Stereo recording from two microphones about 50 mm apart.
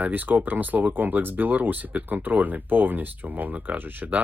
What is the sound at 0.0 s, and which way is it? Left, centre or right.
Speech, right.